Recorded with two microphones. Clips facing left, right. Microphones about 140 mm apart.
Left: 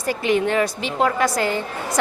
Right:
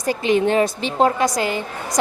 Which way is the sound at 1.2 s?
15° right (ahead or behind).